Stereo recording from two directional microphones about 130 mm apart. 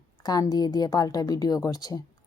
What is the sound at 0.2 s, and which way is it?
Speech, 30° left (ahead or behind).